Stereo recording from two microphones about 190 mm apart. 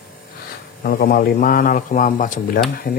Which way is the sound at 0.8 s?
55° left (ahead or behind).